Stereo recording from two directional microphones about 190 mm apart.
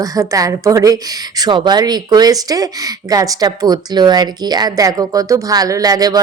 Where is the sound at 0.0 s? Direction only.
15° right (ahead or behind).